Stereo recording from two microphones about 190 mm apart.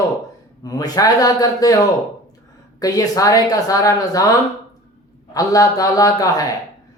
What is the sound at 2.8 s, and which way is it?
A woman's voice, 20° left (ahead or behind).